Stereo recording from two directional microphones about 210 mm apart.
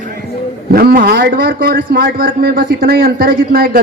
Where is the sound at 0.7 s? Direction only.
45° right (ahead or behind).